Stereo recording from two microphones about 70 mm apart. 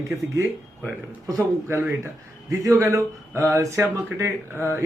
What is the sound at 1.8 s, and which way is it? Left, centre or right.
Speech, right.